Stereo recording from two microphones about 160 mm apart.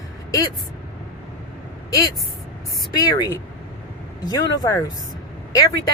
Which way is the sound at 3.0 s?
25° left (ahead or behind).